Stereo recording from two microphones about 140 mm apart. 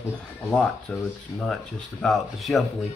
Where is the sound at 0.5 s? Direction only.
5° left (ahead or behind).